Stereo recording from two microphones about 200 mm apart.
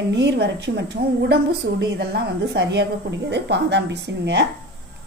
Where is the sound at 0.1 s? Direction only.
60° right (ahead or behind).